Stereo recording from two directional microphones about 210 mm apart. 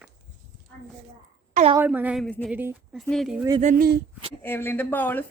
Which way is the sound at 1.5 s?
30° right (ahead or behind).